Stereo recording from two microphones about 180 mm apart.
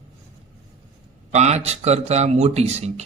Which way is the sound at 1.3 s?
40° right (ahead or behind).